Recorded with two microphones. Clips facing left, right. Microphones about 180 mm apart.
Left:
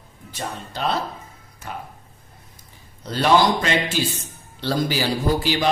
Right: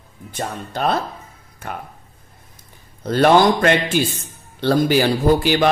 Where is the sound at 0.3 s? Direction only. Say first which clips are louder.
Right 4 dB; 50° right (ahead or behind).